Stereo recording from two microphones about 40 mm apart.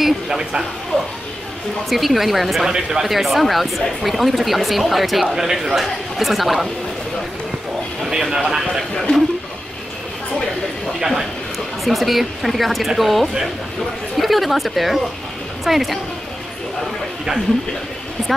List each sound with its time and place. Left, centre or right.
0.0 s speech: centre
0.9 s speech: centre
1.9 s speech: centre
2.7 s speech: centre
3.1 s speech: centre
8.0 s speech: centre
11.8 s speech: centre